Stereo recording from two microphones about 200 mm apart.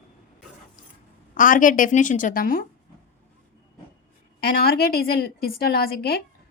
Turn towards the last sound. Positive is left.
turn(degrees=50)  # may be behind; listen again after turning